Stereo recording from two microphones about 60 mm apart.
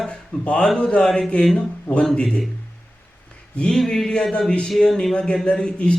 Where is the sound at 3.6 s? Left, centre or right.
Centre.